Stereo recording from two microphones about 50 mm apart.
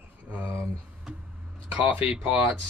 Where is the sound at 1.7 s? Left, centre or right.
Right.